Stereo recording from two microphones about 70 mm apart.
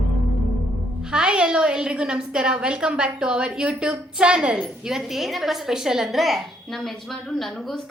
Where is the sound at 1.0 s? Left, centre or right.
Centre.